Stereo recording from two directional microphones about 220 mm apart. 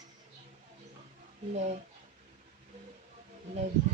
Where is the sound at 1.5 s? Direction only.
30° right (ahead or behind).